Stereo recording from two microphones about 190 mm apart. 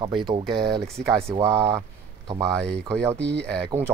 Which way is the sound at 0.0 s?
25° right (ahead or behind).